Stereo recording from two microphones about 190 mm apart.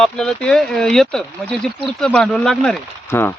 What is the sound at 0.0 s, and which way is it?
Speech, 5° left (ahead or behind).